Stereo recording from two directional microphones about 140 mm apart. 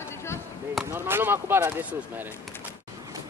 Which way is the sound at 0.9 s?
15° right (ahead or behind).